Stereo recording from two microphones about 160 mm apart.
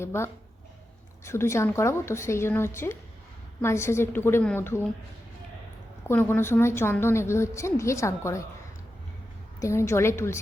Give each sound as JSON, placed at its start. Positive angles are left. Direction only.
{"t": 0.0, "sound": "a woman's voice", "side_deg": 15}
{"t": 6.1, "sound": "a woman's voice", "side_deg": 15}
{"t": 9.6, "sound": "a woman's voice", "side_deg": 20}